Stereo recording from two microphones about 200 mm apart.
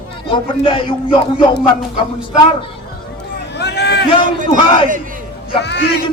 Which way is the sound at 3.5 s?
55° left (ahead or behind).